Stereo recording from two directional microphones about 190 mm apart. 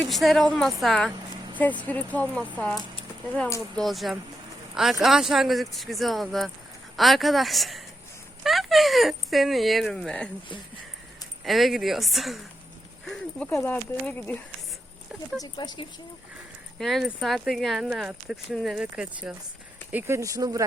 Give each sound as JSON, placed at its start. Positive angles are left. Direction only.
{"t": 0.0, "sound": "speech", "side_deg": 0}
{"t": 11.4, "sound": "speech", "side_deg": 0}
{"t": 15.4, "sound": "speech", "side_deg": 20}
{"t": 16.7, "sound": "speech", "side_deg": 0}